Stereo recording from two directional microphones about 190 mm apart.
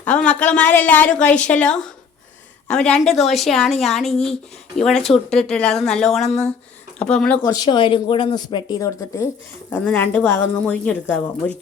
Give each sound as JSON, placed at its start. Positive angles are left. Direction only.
{"t": 0.0, "sound": "speech", "side_deg": 5}
{"t": 6.2, "sound": "speech", "side_deg": 35}
{"t": 7.0, "sound": "speech", "side_deg": 5}
{"t": 7.4, "sound": "speech", "side_deg": 20}